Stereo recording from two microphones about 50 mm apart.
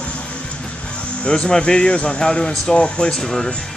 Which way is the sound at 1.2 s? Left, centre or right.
Left.